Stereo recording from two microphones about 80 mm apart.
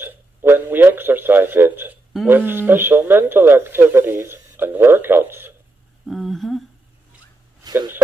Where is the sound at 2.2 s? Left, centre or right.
Right.